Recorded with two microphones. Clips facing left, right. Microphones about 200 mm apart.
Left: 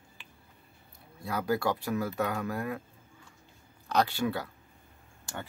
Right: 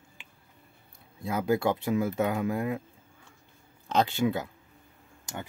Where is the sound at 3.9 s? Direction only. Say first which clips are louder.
Right 2 dB; 20° right (ahead or behind).